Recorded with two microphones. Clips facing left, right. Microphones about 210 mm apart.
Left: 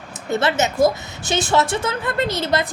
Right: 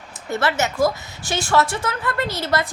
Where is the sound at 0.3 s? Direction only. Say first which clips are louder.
Left 2 dB; 20° left (ahead or behind).